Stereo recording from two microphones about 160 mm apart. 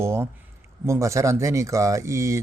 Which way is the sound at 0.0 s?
15° right (ahead or behind).